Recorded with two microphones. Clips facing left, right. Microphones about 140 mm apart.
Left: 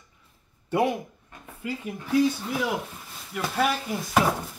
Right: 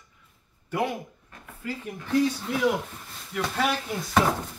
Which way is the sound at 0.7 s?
25° left (ahead or behind).